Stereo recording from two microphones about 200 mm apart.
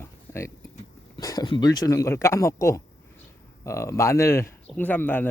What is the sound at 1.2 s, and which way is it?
Speech, 20° left (ahead or behind).